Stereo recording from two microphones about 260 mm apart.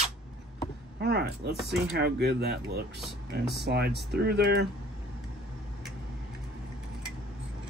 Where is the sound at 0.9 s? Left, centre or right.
Right.